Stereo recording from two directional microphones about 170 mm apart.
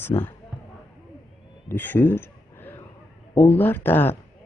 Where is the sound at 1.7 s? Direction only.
10° left (ahead or behind).